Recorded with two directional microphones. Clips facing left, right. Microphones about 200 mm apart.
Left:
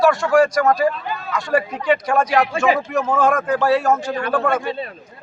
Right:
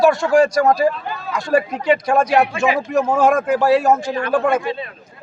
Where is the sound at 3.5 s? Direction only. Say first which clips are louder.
Right 2 dB; 10° right (ahead or behind).